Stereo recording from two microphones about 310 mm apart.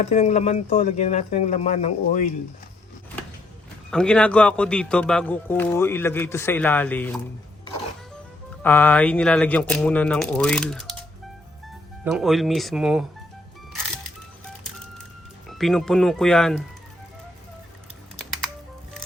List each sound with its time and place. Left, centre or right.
0.0 s speech: left
3.9 s speech: centre
8.6 s speech: centre
12.1 s speech: centre
15.4 s speech: centre